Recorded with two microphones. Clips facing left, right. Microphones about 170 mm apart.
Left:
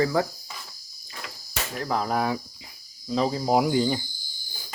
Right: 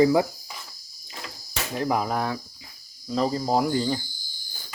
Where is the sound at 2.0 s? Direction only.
5° left (ahead or behind).